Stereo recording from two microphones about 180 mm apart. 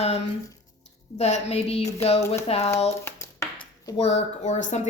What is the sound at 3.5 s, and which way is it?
Speech, 25° left (ahead or behind).